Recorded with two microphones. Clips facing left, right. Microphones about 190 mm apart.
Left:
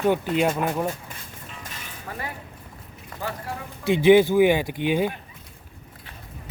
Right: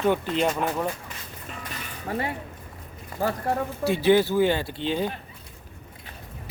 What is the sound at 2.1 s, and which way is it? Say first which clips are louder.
Speech: right 6 dB; 25° right (ahead or behind).